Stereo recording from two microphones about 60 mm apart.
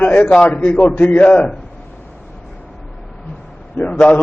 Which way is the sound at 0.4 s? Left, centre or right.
Left.